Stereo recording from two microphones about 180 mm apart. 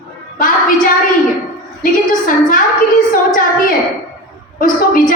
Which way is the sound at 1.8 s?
50° left (ahead or behind).